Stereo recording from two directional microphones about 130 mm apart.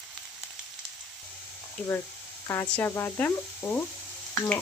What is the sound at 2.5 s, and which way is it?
Speech, 20° left (ahead or behind).